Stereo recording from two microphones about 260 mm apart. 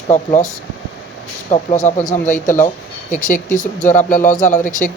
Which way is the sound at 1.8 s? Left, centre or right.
Left.